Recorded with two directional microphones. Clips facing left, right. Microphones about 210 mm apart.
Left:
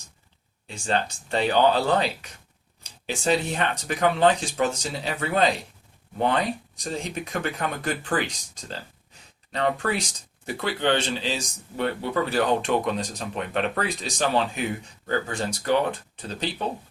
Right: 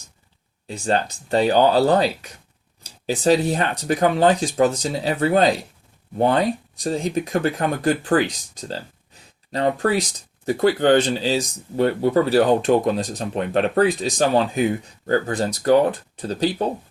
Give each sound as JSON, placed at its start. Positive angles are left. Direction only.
{"t": 0.7, "sound": "speech", "side_deg": -35}